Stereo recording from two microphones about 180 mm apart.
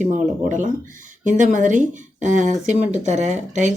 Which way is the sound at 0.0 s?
45° right (ahead or behind).